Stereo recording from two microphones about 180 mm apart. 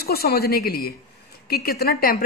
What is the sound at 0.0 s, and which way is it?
A woman's voice, 60° left (ahead or behind).